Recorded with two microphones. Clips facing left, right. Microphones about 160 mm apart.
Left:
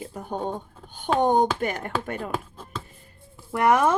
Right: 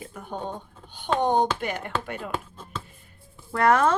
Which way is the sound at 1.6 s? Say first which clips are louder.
Left 2 dB; 45° left (ahead or behind).